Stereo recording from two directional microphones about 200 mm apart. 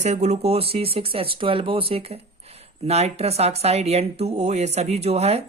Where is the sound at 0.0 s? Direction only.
35° right (ahead or behind).